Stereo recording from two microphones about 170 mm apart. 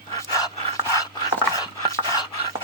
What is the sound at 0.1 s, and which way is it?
Dog, 20° left (ahead or behind).